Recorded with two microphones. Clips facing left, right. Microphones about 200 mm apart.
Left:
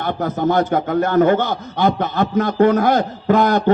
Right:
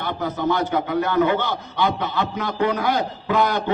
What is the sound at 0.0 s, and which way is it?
A man's voice, 50° left (ahead or behind).